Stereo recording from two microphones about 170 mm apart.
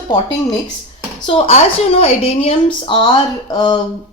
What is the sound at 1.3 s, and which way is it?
Speech, 35° left (ahead or behind).